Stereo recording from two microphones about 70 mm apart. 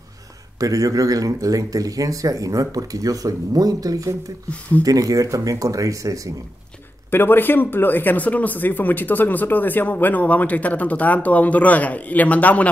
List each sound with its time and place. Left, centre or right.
0.6 s speech: right
4.5 s speech: left
4.8 s speech: right
7.1 s speech: left